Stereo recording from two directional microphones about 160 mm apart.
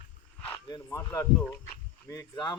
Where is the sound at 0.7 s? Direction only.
20° left (ahead or behind).